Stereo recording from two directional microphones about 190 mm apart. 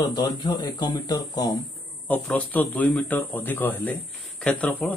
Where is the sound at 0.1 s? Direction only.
25° left (ahead or behind).